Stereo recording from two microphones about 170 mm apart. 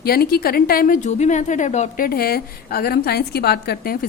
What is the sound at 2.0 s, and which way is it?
A woman's voice, 60° left (ahead or behind).